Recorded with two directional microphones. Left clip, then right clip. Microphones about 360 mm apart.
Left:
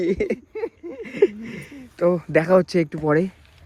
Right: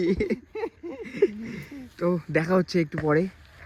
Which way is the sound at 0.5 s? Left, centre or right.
Centre.